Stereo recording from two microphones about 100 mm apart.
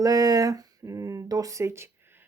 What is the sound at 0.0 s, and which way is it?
Speech, 35° right (ahead or behind).